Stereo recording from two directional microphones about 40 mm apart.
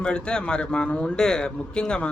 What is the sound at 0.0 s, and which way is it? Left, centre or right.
Speech, left.